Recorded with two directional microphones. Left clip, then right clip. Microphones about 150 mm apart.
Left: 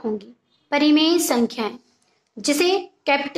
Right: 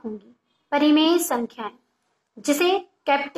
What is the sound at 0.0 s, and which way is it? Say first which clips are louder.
A woman's voice: left 8 dB; 35° left (ahead or behind).